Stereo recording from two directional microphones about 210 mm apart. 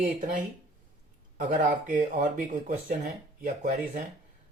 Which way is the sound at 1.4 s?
35° right (ahead or behind).